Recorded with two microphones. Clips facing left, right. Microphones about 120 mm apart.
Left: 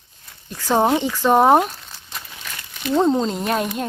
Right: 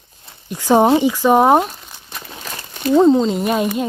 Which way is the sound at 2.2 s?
35° right (ahead or behind).